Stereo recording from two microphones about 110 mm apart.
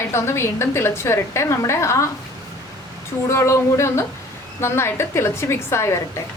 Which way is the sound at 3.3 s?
25° left (ahead or behind).